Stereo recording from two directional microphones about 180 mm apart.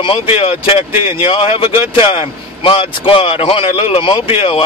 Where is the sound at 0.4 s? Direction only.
30° left (ahead or behind).